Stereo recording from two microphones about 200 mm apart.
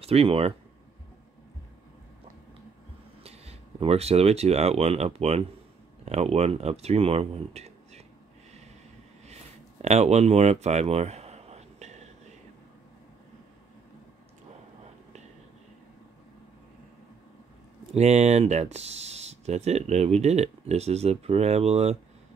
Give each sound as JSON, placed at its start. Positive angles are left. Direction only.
{"t": 0.0, "sound": "speech", "side_deg": -30}
{"t": 3.3, "sound": "speech", "side_deg": -30}
{"t": 9.2, "sound": "a sound", "side_deg": -35}
{"t": 17.9, "sound": "speech", "side_deg": -35}